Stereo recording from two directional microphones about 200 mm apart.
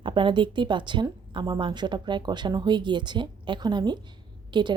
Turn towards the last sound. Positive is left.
turn(degrees=-25)  # may be behind; listen again after turning